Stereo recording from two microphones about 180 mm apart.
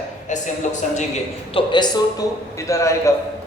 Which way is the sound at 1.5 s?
25° left (ahead or behind).